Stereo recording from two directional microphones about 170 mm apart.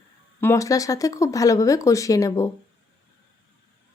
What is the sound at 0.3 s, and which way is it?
Speech, 15° left (ahead or behind).